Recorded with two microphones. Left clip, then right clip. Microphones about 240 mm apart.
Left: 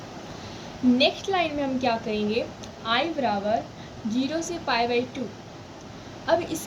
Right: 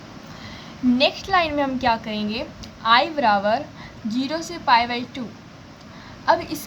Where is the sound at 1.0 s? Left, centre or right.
Right.